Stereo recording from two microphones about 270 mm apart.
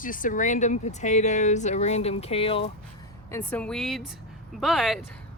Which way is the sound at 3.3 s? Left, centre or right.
Centre.